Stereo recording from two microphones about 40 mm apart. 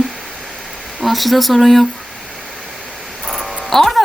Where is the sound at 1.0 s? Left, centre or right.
Centre.